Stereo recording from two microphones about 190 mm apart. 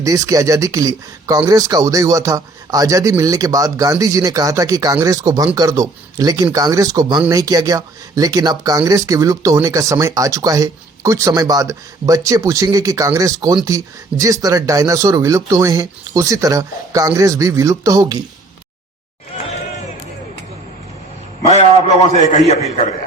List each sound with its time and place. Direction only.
0.0 s speech: 15° right (ahead or behind)
22.2 s a man's voice: 40° left (ahead or behind)